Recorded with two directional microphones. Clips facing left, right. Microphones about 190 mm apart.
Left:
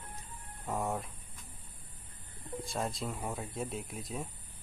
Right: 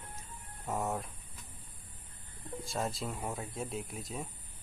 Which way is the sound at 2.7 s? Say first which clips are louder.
Right 1 dB; centre (ahead or behind).